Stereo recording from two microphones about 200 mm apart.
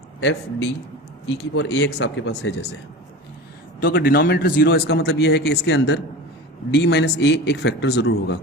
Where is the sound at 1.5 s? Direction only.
60° left (ahead or behind).